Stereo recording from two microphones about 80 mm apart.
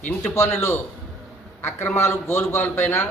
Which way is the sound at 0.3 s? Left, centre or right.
Left.